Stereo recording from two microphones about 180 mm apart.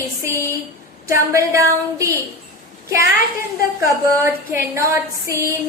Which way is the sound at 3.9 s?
15° right (ahead or behind).